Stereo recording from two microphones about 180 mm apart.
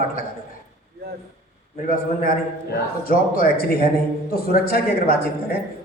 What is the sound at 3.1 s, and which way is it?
A man's voice, 55° left (ahead or behind).